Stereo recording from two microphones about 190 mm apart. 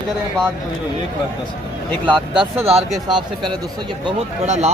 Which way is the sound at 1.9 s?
10° left (ahead or behind).